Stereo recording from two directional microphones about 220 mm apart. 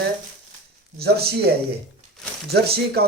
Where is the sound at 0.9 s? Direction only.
45° right (ahead or behind).